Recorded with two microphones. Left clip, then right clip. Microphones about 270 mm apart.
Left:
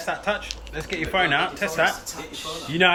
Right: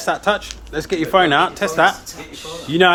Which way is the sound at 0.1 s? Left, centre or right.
Right.